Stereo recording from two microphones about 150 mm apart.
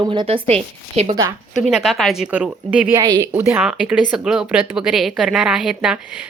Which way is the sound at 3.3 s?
10° right (ahead or behind).